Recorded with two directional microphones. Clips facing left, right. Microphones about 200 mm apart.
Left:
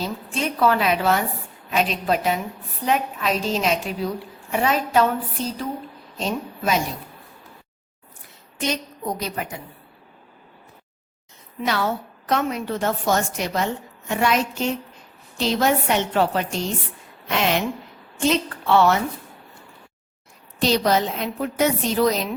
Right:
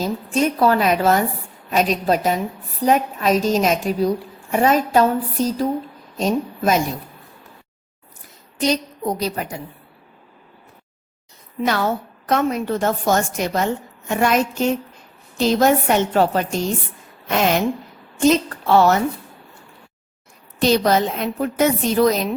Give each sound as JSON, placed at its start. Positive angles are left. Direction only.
{"t": 0.0, "sound": "a woman's voice", "side_deg": -45}
{"t": 8.6, "sound": "a woman's voice", "side_deg": -35}
{"t": 11.6, "sound": "a woman's voice", "side_deg": -45}
{"t": 20.6, "sound": "a woman's voice", "side_deg": -50}